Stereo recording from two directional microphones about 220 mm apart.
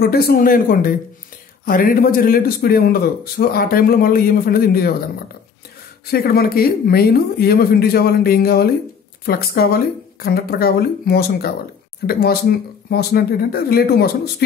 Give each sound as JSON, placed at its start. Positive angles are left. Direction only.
{"t": 0.0, "sound": "a man's voice", "side_deg": 45}
{"t": 6.0, "sound": "speech", "side_deg": 45}